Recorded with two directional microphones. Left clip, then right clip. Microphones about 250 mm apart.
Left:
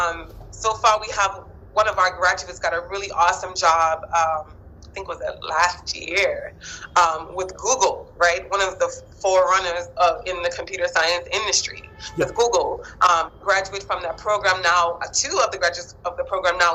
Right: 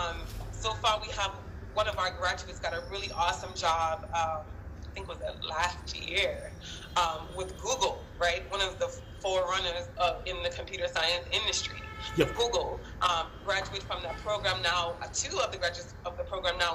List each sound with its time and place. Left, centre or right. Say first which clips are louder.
0.0 s a man's voice: left 12 dB; left